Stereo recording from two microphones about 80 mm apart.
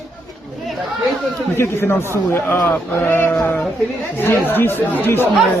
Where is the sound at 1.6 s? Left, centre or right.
Left.